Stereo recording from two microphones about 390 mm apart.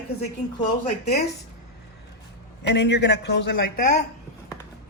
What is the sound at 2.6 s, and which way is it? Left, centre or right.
Speech, left.